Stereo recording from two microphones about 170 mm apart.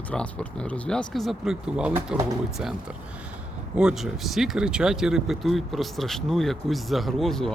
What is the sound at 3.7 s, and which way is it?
Speech, 5° right (ahead or behind).